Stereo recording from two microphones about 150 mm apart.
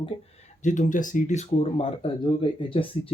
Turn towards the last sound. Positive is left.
turn(degrees=35)  # may be behind; listen again after turning